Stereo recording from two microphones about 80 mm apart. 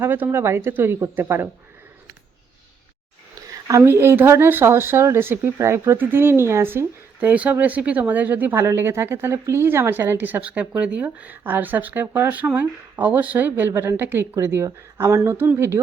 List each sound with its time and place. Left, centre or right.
0.0 s a woman's voice: right
3.5 s a woman's voice: right
7.2 s a woman's voice: centre
13.7 s a woman's voice: right